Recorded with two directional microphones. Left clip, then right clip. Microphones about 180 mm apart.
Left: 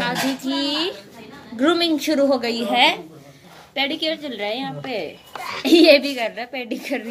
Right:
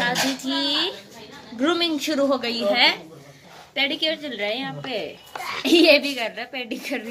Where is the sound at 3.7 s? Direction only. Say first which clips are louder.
Even; 5° left (ahead or behind).